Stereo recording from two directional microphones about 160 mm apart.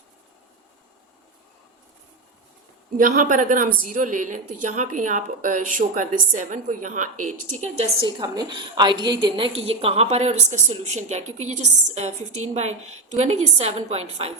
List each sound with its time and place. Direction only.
3.0 s a woman's voice: 55° right (ahead or behind)
8.0 s a woman's voice: 25° right (ahead or behind)